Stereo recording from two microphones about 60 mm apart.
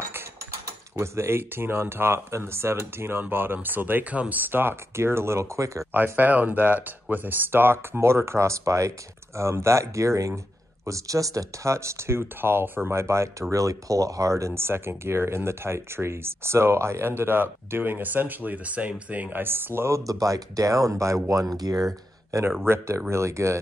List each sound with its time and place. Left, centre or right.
0.9 s speech: right
5.9 s speech: right
19.4 s speech: right
19.9 s speech: right
22.7 s speech: right